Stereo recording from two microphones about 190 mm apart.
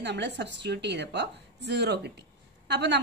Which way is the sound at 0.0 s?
65° right (ahead or behind).